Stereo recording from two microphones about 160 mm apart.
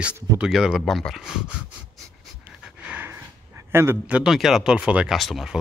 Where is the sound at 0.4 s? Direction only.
5° right (ahead or behind).